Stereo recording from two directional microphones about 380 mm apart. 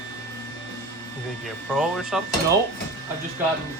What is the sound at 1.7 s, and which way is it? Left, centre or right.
Speech, centre.